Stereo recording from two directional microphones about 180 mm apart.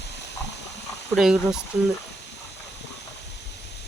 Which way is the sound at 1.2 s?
5° right (ahead or behind).